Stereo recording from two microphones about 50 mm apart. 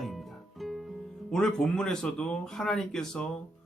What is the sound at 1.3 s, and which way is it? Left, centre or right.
Speech, centre.